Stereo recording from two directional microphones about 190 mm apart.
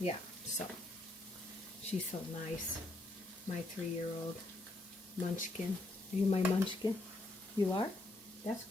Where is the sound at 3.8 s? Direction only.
5° left (ahead or behind).